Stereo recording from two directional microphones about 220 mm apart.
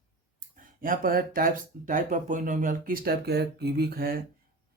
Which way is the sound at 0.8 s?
40° right (ahead or behind).